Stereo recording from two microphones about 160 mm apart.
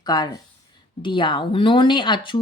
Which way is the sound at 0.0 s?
25° left (ahead or behind).